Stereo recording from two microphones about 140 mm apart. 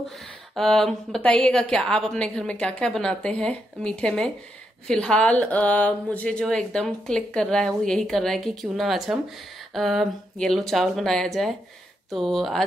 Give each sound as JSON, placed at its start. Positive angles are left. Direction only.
{"t": 0.6, "sound": "speech", "side_deg": 0}